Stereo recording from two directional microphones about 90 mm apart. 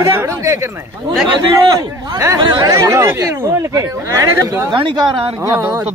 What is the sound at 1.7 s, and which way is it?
A man's voice, 50° right (ahead or behind).